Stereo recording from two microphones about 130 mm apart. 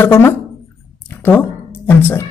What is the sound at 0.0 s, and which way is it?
Speech, 20° left (ahead or behind).